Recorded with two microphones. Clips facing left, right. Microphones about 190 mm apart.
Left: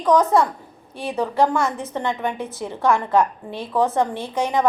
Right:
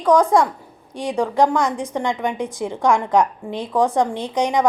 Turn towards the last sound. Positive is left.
turn(degrees=-15)  # may be behind; listen again after turning